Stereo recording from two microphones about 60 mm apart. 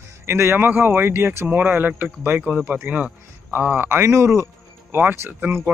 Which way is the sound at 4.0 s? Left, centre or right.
Right.